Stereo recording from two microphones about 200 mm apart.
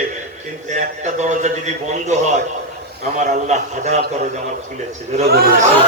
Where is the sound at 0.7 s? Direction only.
35° right (ahead or behind).